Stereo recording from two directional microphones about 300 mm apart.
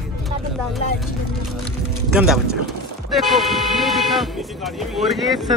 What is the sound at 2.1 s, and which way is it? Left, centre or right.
Speech, centre.